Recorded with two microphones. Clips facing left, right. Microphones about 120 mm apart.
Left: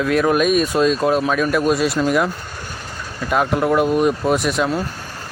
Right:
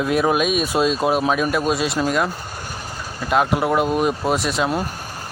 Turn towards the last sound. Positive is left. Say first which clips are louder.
# left 2 dB
turn(degrees=0)  # may be behind; listen again after turning